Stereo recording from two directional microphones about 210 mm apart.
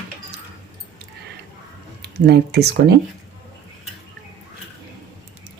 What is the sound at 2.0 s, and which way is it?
Speech, 50° right (ahead or behind).